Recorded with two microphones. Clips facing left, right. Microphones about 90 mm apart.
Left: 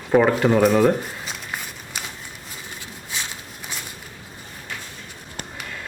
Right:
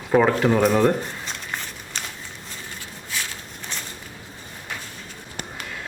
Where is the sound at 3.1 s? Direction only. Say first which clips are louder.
Right 1 dB; 20° left (ahead or behind).